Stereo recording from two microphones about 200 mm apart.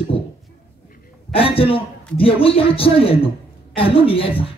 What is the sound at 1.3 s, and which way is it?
Speech, 30° left (ahead or behind).